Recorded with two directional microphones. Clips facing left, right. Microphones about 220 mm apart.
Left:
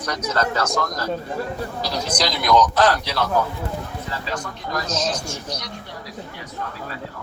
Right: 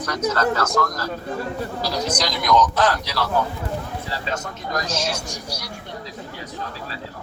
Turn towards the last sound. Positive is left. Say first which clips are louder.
# left 2 dB
turn(degrees=-10)  # may be behind; listen again after turning